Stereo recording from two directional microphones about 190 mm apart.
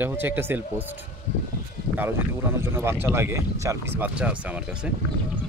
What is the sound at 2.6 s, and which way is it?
Speech, 10° right (ahead or behind).